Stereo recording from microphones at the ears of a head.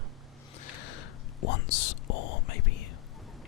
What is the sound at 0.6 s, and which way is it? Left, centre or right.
Whispering, left.